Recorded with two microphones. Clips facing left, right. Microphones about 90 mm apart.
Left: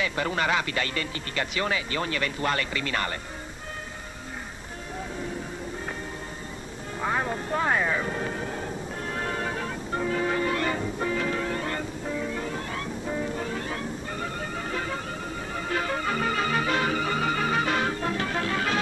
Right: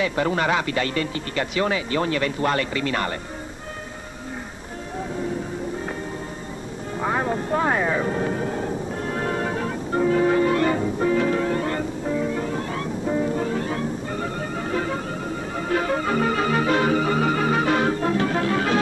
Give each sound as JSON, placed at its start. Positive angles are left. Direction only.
{"t": 0.0, "sound": "speech", "side_deg": -30}
{"t": 7.0, "sound": "vehicle", "side_deg": -30}
{"t": 14.6, "sound": "music", "side_deg": -30}